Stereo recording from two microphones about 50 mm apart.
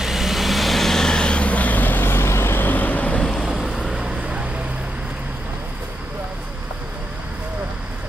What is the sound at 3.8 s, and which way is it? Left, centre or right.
Vehicle, centre.